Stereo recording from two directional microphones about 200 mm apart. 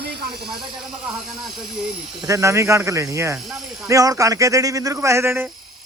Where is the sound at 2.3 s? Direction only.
15° right (ahead or behind).